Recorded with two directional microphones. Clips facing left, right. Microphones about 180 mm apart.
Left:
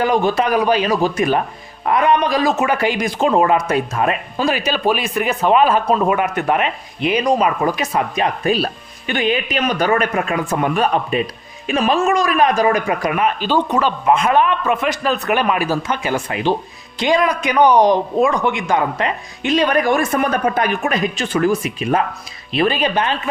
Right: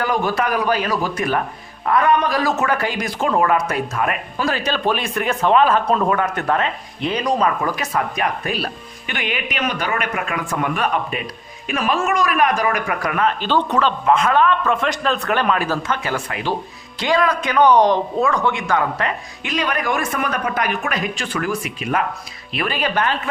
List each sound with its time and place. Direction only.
0.0 s a man's voice: 20° left (ahead or behind)
4.5 s a man's voice: 10° left (ahead or behind)